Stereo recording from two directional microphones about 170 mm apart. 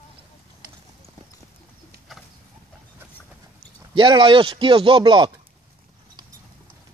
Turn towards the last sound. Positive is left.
turn(degrees=-30)  # may be behind; listen again after turning